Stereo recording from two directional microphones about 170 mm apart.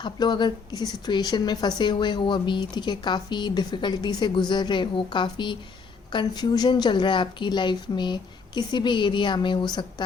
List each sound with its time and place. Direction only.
0.0 s a woman's voice: 25° left (ahead or behind)